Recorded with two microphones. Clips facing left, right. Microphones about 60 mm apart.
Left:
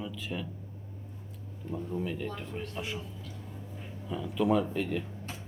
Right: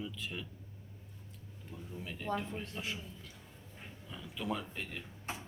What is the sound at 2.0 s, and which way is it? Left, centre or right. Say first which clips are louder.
Speech: left 2 dB; centre.